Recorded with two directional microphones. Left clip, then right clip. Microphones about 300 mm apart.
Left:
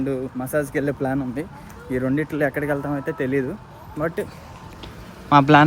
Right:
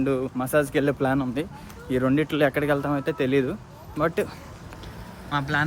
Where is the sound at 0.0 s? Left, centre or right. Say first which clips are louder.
Right 1 dB; centre.